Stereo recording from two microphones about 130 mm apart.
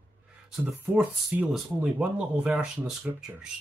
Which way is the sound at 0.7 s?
Centre (ahead or behind).